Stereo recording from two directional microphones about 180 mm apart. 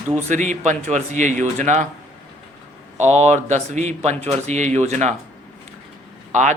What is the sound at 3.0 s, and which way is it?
Speech, 40° right (ahead or behind).